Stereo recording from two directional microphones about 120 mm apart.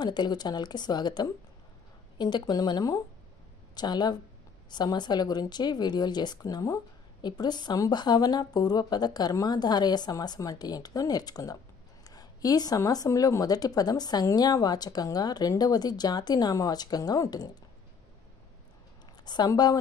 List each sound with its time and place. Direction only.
0.0 s speech: 35° left (ahead or behind)
19.2 s speech: 35° left (ahead or behind)